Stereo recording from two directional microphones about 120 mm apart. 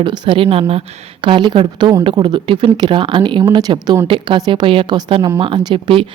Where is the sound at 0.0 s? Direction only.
45° right (ahead or behind).